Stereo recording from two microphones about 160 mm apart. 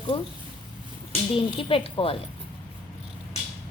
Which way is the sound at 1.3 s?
35° left (ahead or behind).